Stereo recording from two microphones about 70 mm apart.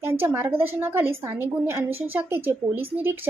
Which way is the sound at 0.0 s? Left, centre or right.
Right.